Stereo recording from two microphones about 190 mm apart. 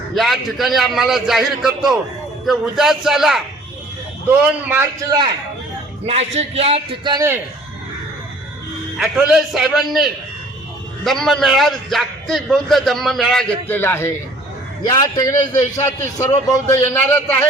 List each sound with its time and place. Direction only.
0.1 s a man's voice: centre (ahead or behind)
4.7 s a man's voice: 15° right (ahead or behind)
6.1 s a man's voice: 35° right (ahead or behind)
9.0 s a man's voice: 5° right (ahead or behind)